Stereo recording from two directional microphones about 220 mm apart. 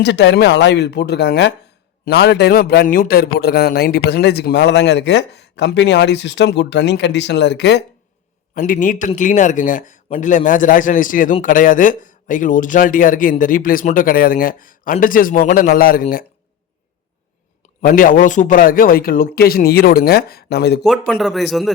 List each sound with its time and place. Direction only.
0.0 s a man's voice: 50° left (ahead or behind)
8.5 s a man's voice: 40° left (ahead or behind)
17.8 s a man's voice: 40° left (ahead or behind)
21.1 s a man's voice: centre (ahead or behind)